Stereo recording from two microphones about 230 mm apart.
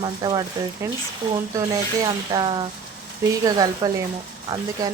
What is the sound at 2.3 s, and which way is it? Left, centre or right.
Speech, centre.